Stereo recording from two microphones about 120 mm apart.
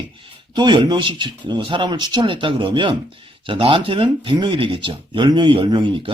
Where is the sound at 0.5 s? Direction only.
40° right (ahead or behind).